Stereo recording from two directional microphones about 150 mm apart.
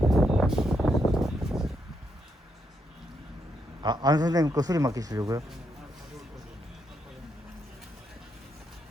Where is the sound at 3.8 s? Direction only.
30° right (ahead or behind).